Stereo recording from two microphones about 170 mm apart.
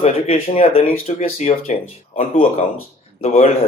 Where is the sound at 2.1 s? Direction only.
55° left (ahead or behind).